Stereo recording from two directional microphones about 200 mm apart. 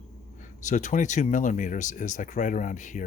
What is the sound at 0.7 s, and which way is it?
Speech, 35° left (ahead or behind).